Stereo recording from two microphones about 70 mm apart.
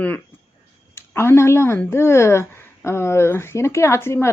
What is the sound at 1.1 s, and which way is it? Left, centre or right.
A woman's voice, left.